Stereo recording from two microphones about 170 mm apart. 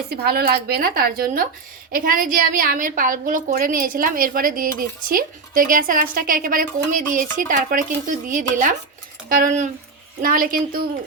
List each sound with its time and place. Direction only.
0.1 s a woman's voice: 65° right (ahead or behind)